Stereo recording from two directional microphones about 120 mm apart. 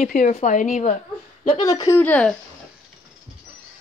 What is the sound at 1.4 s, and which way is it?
Speech, 35° left (ahead or behind).